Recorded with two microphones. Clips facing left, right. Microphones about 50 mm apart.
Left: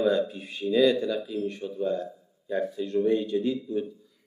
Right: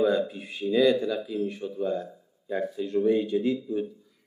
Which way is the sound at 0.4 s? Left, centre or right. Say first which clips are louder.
Even; centre.